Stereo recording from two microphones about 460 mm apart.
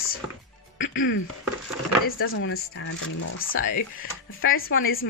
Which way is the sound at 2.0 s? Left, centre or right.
Left.